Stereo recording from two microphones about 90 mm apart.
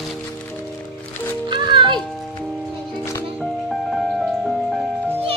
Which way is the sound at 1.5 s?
60° right (ahead or behind).